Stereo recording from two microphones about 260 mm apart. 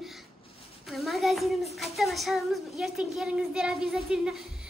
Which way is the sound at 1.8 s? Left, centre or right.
Centre.